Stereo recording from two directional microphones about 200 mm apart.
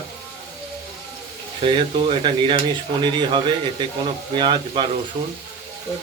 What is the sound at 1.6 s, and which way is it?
Speech, 25° right (ahead or behind).